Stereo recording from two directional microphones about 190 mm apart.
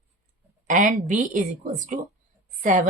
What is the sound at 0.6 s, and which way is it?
A woman's voice, 45° right (ahead or behind).